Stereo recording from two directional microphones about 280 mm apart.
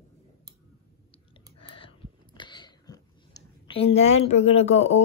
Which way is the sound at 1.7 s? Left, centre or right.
Centre.